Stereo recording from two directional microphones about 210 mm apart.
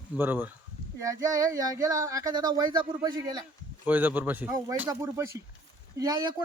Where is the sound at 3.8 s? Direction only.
10° right (ahead or behind).